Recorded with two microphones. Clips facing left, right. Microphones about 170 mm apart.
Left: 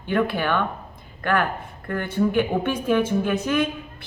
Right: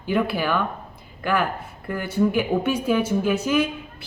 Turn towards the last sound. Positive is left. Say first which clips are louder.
# right 1 dB
turn(degrees=-5)  # may be behind; listen again after turning